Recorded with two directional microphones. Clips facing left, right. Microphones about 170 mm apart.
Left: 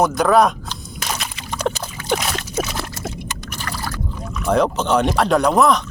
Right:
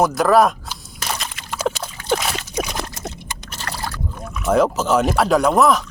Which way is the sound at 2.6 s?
15° right (ahead or behind).